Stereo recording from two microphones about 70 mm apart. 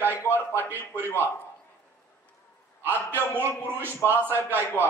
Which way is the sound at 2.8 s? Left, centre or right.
Right.